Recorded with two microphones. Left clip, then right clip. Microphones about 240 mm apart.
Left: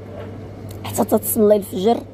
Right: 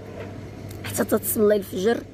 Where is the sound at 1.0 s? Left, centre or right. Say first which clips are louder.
Left 5 dB; left.